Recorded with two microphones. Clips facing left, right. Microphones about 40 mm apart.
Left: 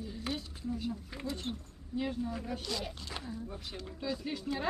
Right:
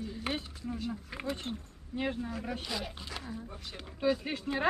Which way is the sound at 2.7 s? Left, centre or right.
Centre.